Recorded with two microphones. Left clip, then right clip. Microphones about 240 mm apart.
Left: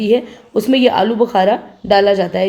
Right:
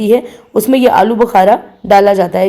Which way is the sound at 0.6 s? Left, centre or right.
Centre.